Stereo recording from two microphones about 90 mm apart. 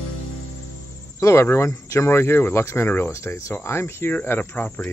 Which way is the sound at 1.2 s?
35° left (ahead or behind).